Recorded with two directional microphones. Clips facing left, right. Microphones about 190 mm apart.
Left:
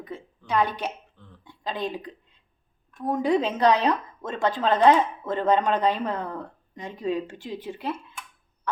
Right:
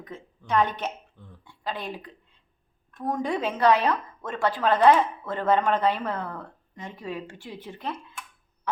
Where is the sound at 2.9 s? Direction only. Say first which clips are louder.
Left 5 dB; 5° left (ahead or behind).